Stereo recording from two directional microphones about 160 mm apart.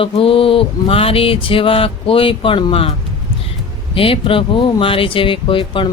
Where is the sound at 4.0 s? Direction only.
35° left (ahead or behind).